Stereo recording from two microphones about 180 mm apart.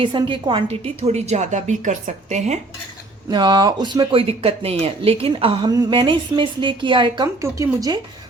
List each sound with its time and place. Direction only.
0.0 s a woman's voice: 25° right (ahead or behind)
3.2 s a woman's voice: 25° right (ahead or behind)